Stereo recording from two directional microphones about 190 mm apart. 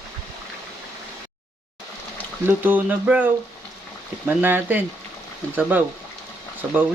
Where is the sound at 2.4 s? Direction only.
10° right (ahead or behind).